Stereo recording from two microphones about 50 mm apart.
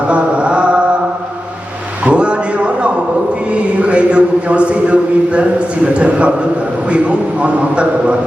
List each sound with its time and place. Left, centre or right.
0.1 s chant: right
2.0 s a sound: right
3.5 s a man's voice: right